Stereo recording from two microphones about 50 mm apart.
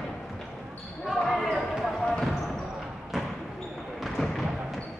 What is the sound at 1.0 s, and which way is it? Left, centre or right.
Basketball bounce, centre.